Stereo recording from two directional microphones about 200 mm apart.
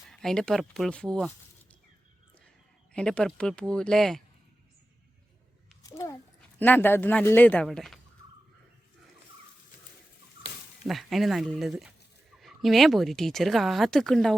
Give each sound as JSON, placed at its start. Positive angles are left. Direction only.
{"t": 0.1, "sound": "speech", "side_deg": 0}
{"t": 2.9, "sound": "speech", "side_deg": 5}
{"t": 5.8, "sound": "speech", "side_deg": 15}
{"t": 10.8, "sound": "speech", "side_deg": 0}